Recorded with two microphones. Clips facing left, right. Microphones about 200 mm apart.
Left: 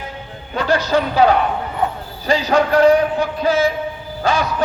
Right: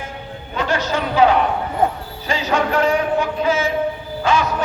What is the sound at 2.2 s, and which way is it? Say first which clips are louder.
Music: left 4 dB; 35° left (ahead or behind).